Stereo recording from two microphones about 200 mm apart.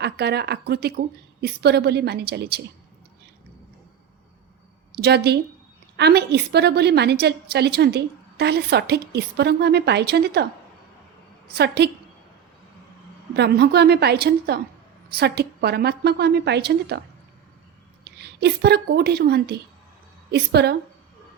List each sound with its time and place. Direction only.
0.0 s a woman's voice: 55° right (ahead or behind)
4.9 s a woman's voice: 55° right (ahead or behind)
13.3 s a woman's voice: 55° right (ahead or behind)
18.0 s a woman's voice: 55° right (ahead or behind)